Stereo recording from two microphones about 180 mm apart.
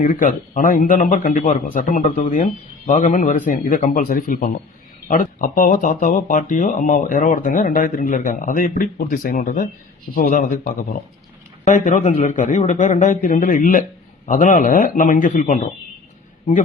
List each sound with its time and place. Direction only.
0.0 s speech: 45° left (ahead or behind)